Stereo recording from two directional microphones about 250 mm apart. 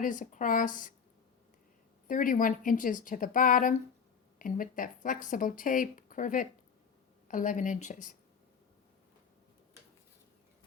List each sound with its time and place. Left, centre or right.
0.0 s speech: left
2.0 s speech: left